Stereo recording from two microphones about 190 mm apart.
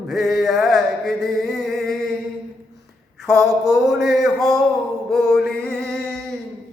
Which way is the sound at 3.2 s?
Centre (ahead or behind).